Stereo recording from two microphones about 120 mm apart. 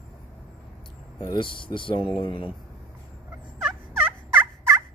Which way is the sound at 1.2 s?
40° left (ahead or behind).